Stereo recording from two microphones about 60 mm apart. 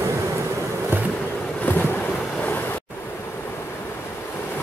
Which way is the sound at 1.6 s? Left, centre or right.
Left.